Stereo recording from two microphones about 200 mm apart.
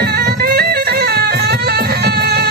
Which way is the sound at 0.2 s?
50° right (ahead or behind).